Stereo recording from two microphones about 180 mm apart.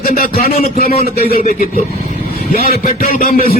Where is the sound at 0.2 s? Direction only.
55° left (ahead or behind).